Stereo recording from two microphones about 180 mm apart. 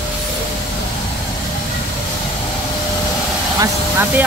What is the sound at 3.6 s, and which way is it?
Vehicle, 10° right (ahead or behind).